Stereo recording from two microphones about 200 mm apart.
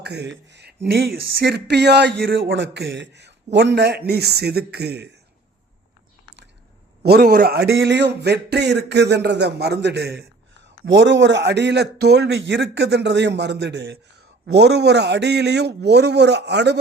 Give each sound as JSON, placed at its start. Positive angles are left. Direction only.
{"t": 0.0, "sound": "a man's voice", "side_deg": -55}
{"t": 7.0, "sound": "a man's voice", "side_deg": -50}